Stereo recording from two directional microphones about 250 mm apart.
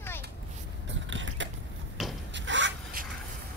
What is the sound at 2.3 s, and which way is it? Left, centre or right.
Rub, right.